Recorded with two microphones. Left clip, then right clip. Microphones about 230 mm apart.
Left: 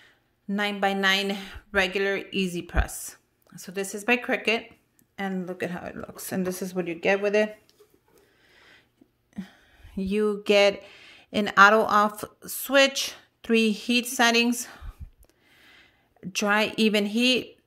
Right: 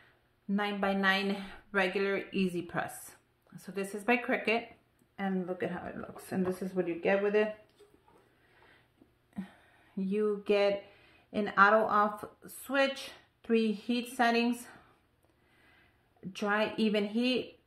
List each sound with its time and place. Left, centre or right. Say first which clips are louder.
0.5 s speech: left 6 dB; left
9.3 s a sound: left 4 dB; left
10.0 s speech: left 6 dB; left